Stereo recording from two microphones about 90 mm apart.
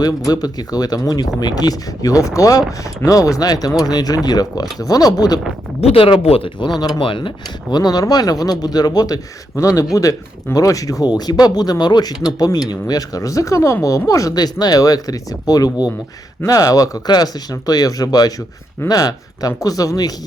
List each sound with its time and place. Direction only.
0.0 s speech: 45° left (ahead or behind)
5.9 s speech: 80° left
6.7 s speech: 45° left (ahead or behind)
7.0 s speech: 70° left (ahead or behind); by 20.1 s 40° left (ahead or behind)